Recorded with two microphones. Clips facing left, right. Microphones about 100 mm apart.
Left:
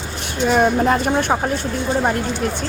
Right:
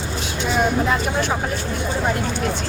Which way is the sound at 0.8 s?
55° left (ahead or behind).